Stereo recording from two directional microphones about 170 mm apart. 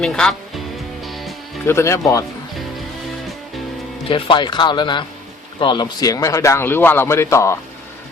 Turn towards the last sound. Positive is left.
turn(degrees=15)  # may be behind; listen again after turning